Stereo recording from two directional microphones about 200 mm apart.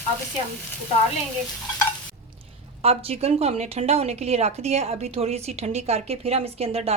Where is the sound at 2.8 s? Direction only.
30° right (ahead or behind).